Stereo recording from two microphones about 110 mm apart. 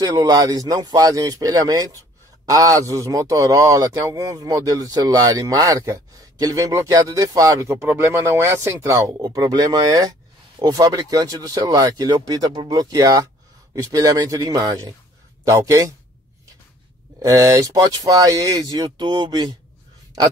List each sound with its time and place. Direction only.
0.0 s a man's voice: 35° right (ahead or behind)
9.2 s a man's voice: 40° right (ahead or behind)
17.2 s a man's voice: 30° right (ahead or behind)